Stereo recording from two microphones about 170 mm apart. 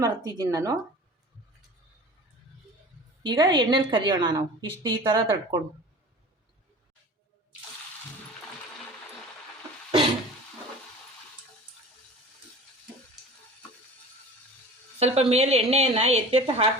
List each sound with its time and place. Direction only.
0.0 s a woman's voice: 20° right (ahead or behind)
3.2 s a woman's voice: 25° right (ahead or behind)
14.9 s a woman's voice: 35° right (ahead or behind)